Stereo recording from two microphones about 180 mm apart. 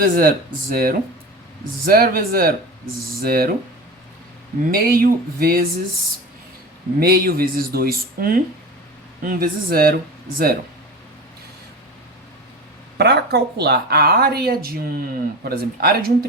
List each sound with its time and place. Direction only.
0.0 s speech: 55° right (ahead or behind)
4.7 s speech: 55° right (ahead or behind)
7.0 s speech: 55° right (ahead or behind)
13.0 s speech: 65° right (ahead or behind)